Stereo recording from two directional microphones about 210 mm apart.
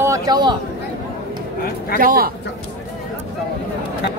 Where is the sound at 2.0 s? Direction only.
45° right (ahead or behind).